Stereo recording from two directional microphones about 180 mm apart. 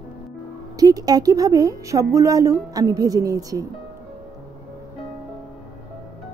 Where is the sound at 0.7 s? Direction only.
20° right (ahead or behind).